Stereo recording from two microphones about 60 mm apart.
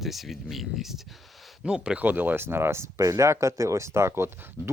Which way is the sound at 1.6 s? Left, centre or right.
Centre.